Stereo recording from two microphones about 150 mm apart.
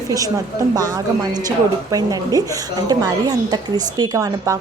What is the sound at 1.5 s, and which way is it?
A woman's voice, 25° right (ahead or behind).